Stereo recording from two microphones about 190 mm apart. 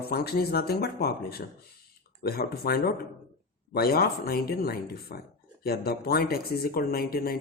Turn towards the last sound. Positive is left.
turn(degrees=50)  # may be behind; listen again after turning